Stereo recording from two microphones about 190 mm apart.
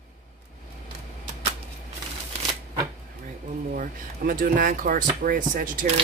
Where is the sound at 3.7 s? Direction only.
45° right (ahead or behind).